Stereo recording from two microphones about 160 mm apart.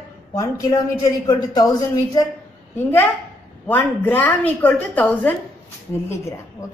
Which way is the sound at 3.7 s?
10° left (ahead or behind).